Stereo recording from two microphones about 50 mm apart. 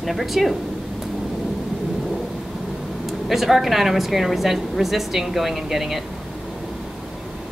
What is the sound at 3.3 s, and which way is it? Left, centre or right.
A woman's voice, centre.